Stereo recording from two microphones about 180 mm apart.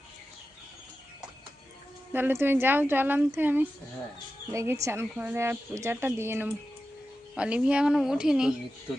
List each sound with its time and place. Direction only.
2.1 s a woman's voice: 10° right (ahead or behind)